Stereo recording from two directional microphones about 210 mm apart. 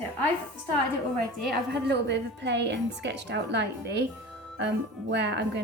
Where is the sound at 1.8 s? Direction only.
55° right (ahead or behind).